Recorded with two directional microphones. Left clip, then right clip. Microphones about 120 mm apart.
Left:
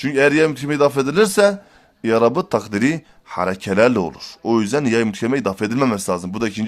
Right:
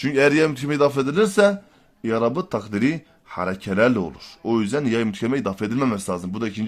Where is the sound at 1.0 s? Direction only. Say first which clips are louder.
Left 3 dB; 30° left (ahead or behind).